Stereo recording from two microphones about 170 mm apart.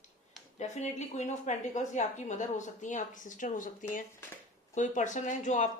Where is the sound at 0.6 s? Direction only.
40° left (ahead or behind).